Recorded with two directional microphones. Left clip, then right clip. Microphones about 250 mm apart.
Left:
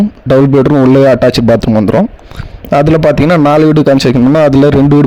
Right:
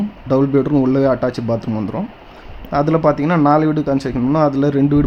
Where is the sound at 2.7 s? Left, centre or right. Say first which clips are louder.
Left 7 dB; left.